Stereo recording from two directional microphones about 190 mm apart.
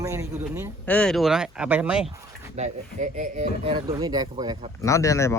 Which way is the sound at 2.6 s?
40° right (ahead or behind).